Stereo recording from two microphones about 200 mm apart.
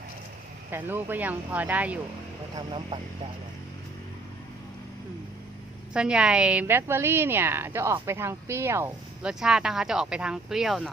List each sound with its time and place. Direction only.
0.7 s a woman's voice: 10° right (ahead or behind)
2.6 s speech: 25° right (ahead or behind)
5.9 s a woman's voice: 5° right (ahead or behind)